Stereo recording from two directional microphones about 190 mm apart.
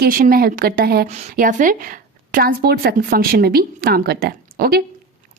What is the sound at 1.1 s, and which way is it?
A woman's voice, 40° right (ahead or behind).